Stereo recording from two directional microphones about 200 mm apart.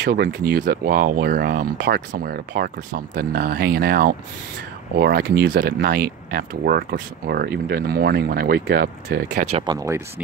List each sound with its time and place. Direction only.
0.0 s speech: 50° right (ahead or behind)
9.7 s speech: 15° right (ahead or behind)